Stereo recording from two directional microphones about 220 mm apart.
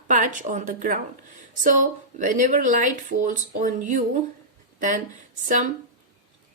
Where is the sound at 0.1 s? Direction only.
35° right (ahead or behind).